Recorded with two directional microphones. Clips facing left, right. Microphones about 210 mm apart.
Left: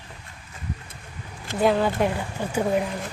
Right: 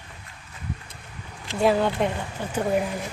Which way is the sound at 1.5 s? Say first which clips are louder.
Even; centre (ahead or behind).